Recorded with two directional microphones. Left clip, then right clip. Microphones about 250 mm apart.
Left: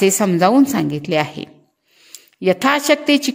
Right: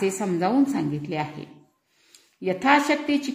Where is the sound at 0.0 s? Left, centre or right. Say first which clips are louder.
Left 10 dB; left.